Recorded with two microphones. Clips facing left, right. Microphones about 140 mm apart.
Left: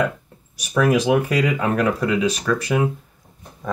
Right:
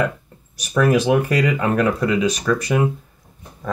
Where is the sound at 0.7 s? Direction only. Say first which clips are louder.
Right 1 dB; 10° left (ahead or behind).